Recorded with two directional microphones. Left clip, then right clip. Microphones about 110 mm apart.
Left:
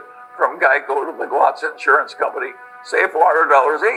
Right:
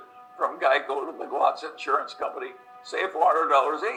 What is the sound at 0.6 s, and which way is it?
Speech, 45° right (ahead or behind).